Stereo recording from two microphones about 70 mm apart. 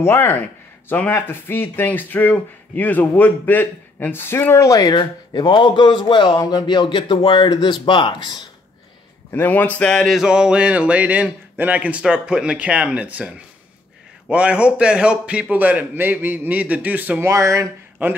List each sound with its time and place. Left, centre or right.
0.0 s speech: left
0.3 s speech: left
4.6 s speech: left
4.9 s a man's voice: left
9.3 s speech: left
9.8 s a sound: centre
10.1 s speech: centre
14.3 s a man's voice: centre
17.2 s speech: right
18.0 s a man's voice: right